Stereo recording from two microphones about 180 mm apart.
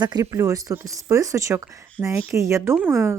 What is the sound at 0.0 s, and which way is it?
A woman's voice, 20° right (ahead or behind).